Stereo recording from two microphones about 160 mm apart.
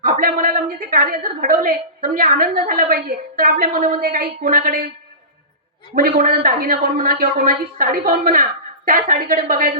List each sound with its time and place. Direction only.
0.0 s a woman's voice: 60° right (ahead or behind)
5.9 s a woman's voice: 65° right (ahead or behind)